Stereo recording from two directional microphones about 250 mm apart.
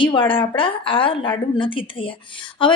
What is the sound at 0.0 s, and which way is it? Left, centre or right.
A woman's voice, centre.